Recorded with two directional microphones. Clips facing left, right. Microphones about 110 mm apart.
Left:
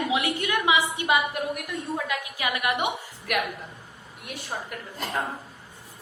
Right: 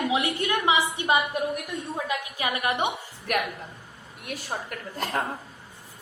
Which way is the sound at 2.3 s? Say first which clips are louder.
Even; 30° right (ahead or behind).